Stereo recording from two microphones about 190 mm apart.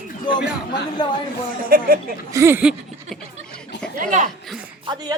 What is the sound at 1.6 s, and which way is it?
Speech, 50° right (ahead or behind).